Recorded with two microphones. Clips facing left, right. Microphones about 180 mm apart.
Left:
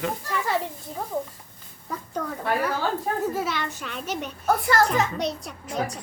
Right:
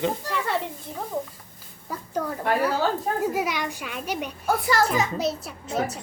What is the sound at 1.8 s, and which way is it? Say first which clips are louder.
A child's voice: right 2 dB; 10° right (ahead or behind).